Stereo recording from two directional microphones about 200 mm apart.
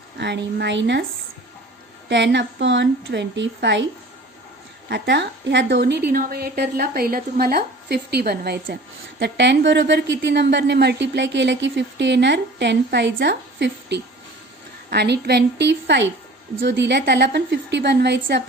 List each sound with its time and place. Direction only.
0.2 s a woman's voice: 60° right (ahead or behind)
2.0 s a woman's voice: 60° right (ahead or behind)
4.9 s a woman's voice: 60° right (ahead or behind)
6.1 s a woman's voice: 45° right (ahead or behind)